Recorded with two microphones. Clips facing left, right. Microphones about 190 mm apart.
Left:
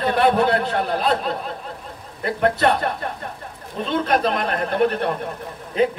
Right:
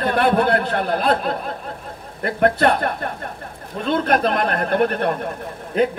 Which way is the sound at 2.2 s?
50° right (ahead or behind).